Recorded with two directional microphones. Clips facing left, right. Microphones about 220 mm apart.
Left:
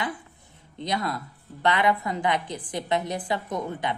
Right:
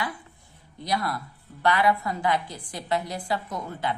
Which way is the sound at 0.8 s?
20° left (ahead or behind).